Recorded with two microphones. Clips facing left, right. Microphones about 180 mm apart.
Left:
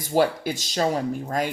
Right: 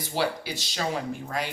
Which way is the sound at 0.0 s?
45° left (ahead or behind).